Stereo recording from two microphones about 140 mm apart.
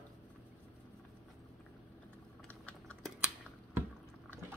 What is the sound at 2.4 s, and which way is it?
Typing, 10° left (ahead or behind).